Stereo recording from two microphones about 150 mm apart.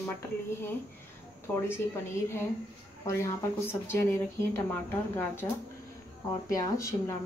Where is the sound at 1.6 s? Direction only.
15° left (ahead or behind).